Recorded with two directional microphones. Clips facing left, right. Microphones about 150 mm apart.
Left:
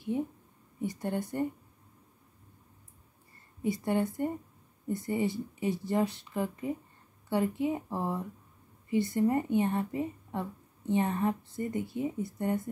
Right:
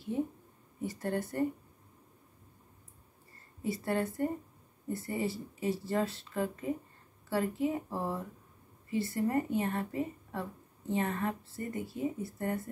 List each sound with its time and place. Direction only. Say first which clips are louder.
0.7 s a woman's voice: left 1 dB; 15° left (ahead or behind)
3.6 s a woman's voice: left 3 dB; 15° left (ahead or behind)